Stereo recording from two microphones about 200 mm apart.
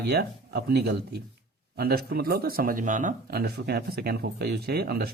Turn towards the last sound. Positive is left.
turn(degrees=-50)  # may be behind; listen again after turning